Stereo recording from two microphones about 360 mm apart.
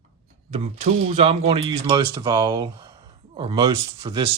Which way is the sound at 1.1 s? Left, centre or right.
Centre.